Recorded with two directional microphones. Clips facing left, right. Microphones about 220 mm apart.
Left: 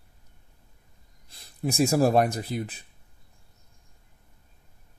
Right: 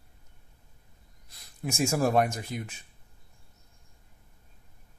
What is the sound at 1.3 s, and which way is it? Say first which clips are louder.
Speech: left 5 dB; 30° left (ahead or behind).